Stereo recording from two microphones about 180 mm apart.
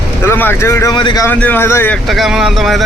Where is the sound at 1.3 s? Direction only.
10° left (ahead or behind).